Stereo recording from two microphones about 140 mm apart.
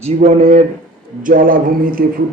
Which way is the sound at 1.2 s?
85° right.